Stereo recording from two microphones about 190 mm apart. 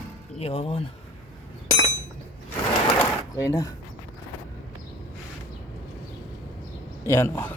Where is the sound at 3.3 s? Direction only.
15° left (ahead or behind).